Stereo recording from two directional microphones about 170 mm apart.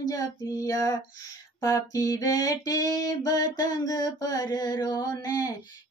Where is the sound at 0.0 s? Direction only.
20° left (ahead or behind).